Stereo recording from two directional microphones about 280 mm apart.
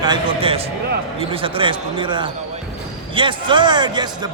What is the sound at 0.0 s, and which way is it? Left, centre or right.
A man's voice, centre.